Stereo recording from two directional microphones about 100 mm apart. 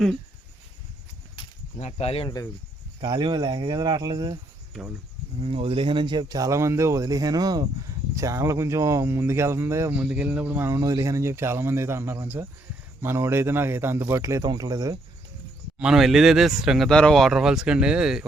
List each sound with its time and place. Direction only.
2.0 s speech: 90° left
3.0 s speech: 50° right (ahead or behind)
5.4 s a man's voice: 65° right (ahead or behind); by 14.9 s 40° right (ahead or behind)
15.8 s speech: 5° right (ahead or behind)